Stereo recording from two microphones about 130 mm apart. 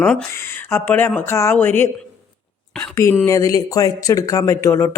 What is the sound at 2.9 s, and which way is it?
Speech, 20° left (ahead or behind).